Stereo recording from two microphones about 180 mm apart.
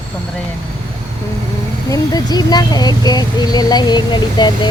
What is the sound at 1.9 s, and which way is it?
Speech, 20° left (ahead or behind).